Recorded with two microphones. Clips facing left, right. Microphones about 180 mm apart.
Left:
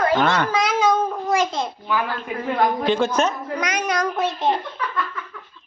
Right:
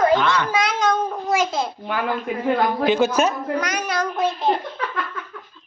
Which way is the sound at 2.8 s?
5° right (ahead or behind).